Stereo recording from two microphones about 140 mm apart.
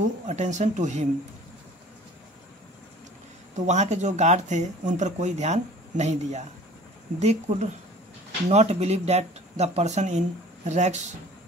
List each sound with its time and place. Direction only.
0.3 s speech: 55° right (ahead or behind)
3.5 s speech: 55° right (ahead or behind)